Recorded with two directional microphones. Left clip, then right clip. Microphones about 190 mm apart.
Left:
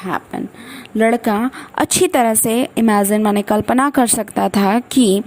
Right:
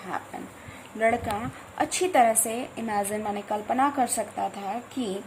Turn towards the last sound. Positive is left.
turn(degrees=45)  # may be behind; listen again after turning